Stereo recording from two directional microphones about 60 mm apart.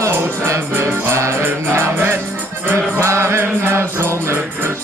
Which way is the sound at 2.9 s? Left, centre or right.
Right.